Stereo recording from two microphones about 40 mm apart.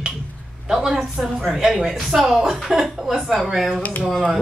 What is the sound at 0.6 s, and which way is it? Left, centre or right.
A woman's voice, centre.